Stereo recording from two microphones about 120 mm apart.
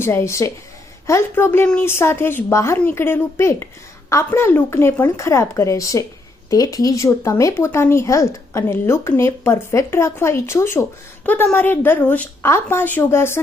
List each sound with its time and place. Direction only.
0.0 s a woman's voice: 20° left (ahead or behind)